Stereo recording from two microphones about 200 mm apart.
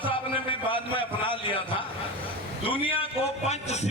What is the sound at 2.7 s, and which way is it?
A man's voice, 25° left (ahead or behind).